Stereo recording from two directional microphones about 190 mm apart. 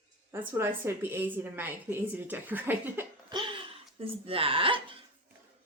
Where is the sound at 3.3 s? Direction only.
25° right (ahead or behind).